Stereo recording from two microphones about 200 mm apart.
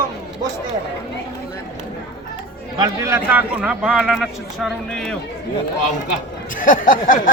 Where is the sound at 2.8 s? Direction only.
15° right (ahead or behind); by 5.2 s centre (ahead or behind).